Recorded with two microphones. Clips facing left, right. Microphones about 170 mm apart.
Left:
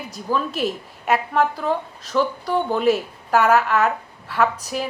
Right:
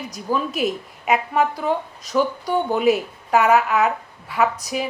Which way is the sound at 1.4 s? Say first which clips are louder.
Even; 10° right (ahead or behind).